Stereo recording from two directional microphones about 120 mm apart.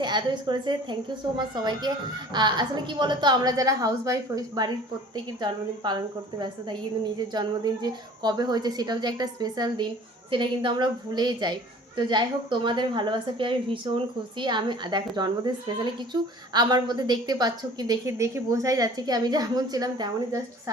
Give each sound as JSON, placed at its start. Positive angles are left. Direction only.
{"t": 0.0, "sound": "a woman's voice", "side_deg": -40}